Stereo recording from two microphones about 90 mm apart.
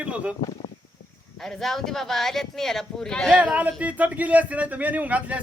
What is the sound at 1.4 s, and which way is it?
Speech, 5° left (ahead or behind).